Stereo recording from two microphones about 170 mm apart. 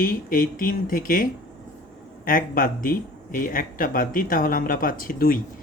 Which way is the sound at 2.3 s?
55° left (ahead or behind).